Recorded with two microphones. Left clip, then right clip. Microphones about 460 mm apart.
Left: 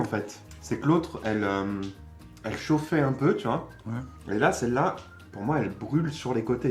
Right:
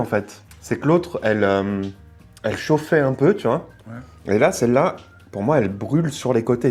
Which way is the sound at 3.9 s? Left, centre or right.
Left.